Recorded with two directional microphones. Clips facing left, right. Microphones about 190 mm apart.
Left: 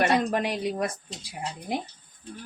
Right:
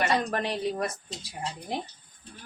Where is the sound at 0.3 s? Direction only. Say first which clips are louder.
Left 2 dB; 15° left (ahead or behind).